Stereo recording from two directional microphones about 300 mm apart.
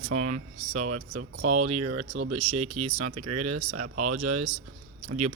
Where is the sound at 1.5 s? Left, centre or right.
Right.